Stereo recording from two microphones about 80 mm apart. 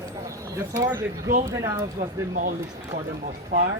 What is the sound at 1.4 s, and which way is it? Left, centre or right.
Speech, right.